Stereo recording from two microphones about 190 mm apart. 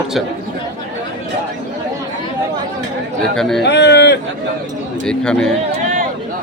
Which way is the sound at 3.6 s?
65° left (ahead or behind).